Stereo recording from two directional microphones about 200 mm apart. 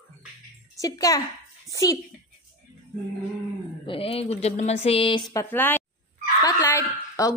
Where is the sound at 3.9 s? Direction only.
30° left (ahead or behind); by 5.8 s 10° left (ahead or behind).